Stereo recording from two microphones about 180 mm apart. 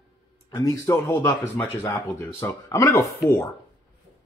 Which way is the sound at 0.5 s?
20° left (ahead or behind).